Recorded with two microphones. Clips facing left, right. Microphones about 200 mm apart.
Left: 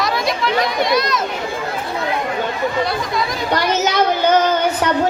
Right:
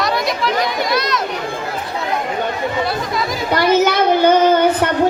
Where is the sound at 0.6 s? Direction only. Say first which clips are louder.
Left 1 dB; centre (ahead or behind).